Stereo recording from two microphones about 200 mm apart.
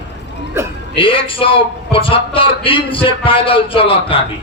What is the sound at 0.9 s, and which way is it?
A man's voice, 25° left (ahead or behind).